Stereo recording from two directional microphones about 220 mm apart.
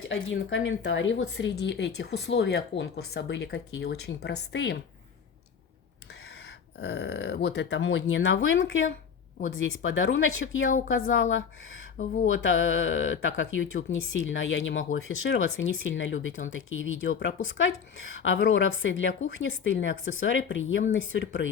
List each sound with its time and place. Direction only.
0.1 s speech: 60° left (ahead or behind)
6.7 s speech: 50° left (ahead or behind)